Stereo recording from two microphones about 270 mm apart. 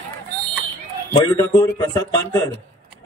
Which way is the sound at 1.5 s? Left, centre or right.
Centre.